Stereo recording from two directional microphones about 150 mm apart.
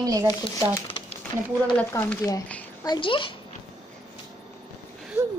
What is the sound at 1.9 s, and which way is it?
Speech, 20° left (ahead or behind).